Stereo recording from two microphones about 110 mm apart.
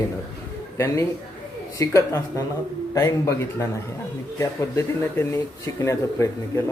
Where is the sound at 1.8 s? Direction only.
25° left (ahead or behind).